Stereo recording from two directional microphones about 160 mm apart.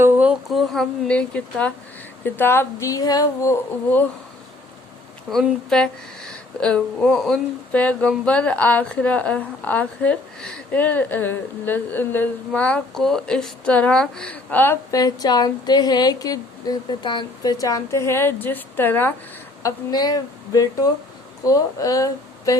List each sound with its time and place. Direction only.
0.0 s speech: 10° right (ahead or behind); by 4.0 s 15° left (ahead or behind)
5.3 s speech: centre (ahead or behind)
19.6 s speech: 25° left (ahead or behind)